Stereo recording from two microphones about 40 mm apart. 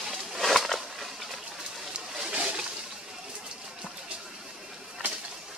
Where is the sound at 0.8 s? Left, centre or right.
Centre.